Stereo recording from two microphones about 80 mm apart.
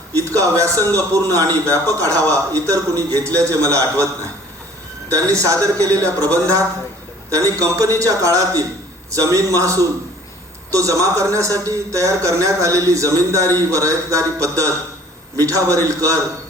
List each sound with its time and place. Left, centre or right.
0.1 s a man's voice: right